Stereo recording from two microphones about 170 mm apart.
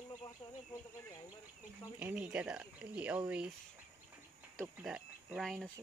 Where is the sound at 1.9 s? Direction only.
10° right (ahead or behind).